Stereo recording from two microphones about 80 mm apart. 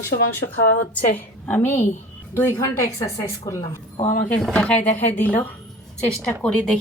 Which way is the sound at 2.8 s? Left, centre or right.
Left.